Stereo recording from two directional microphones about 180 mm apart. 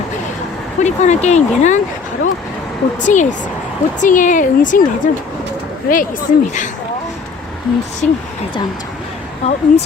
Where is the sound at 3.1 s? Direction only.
45° left (ahead or behind).